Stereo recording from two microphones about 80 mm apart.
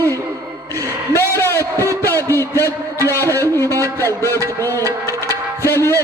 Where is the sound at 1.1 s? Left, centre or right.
Left.